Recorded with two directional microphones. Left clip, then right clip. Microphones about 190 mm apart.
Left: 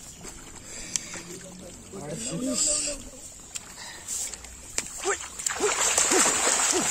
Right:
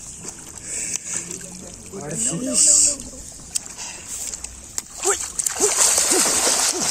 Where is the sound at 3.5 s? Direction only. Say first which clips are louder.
Right 9 dB; 60° right (ahead or behind).